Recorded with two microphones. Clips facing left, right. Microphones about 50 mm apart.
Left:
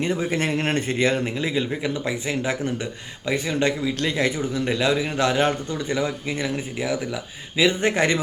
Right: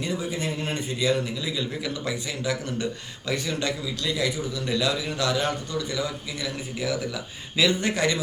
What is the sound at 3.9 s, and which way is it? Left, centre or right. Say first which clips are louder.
A man's voice: left 4 dB; left.